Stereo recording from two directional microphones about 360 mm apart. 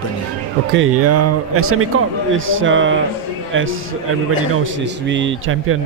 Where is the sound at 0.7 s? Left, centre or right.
Right.